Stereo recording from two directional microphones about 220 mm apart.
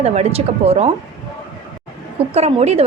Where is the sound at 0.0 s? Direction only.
30° right (ahead or behind).